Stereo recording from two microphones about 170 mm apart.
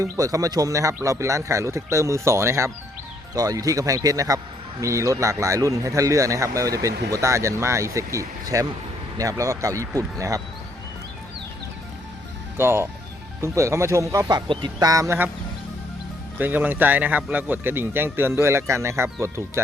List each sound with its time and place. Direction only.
0.0 s a man's voice: 20° right (ahead or behind)
12.5 s a man's voice: 15° right (ahead or behind)
16.4 s speech: 10° right (ahead or behind)